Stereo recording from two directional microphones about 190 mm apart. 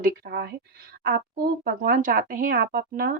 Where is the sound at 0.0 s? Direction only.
55° right (ahead or behind).